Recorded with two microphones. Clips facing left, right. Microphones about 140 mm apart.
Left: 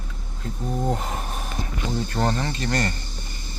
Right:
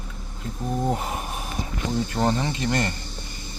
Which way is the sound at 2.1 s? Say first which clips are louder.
Right 1 dB; 10° right (ahead or behind).